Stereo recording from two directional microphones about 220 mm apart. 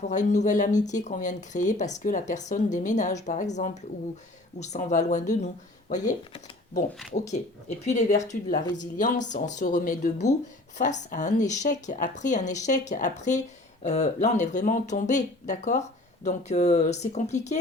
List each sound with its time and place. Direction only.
0.1 s speech: 35° left (ahead or behind)